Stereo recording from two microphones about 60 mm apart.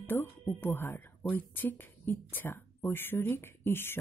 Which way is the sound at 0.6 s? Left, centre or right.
Left.